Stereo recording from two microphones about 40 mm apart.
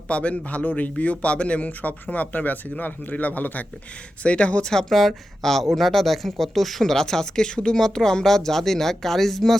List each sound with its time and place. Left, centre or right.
0.1 s speech: left
1.6 s speech: left
4.2 s speech: left
4.9 s speech: centre
6.9 s speech: centre